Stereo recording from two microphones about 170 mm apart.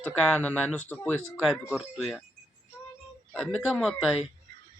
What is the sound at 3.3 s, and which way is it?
Speech, 5° left (ahead or behind).